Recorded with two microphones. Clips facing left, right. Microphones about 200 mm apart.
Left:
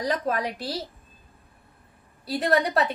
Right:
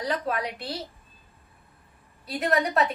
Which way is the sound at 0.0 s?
45° left (ahead or behind).